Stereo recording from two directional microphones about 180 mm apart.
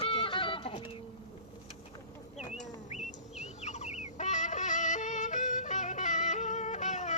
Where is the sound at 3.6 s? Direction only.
40° left (ahead or behind).